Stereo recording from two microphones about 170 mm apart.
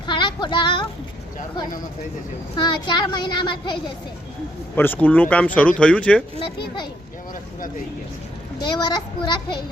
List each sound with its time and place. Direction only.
0.0 s child singing: 25° left (ahead or behind)
2.6 s a child's voice: 25° left (ahead or behind)
4.7 s speech: 10° left (ahead or behind)
8.6 s a child's voice: 25° left (ahead or behind)